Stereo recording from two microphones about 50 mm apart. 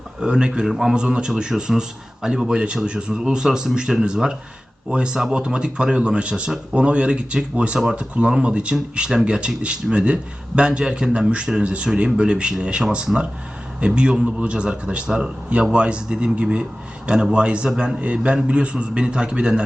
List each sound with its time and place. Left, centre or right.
0.2 s a man's voice: centre